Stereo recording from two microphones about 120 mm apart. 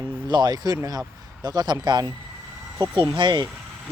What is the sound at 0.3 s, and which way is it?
Speech, 35° right (ahead or behind).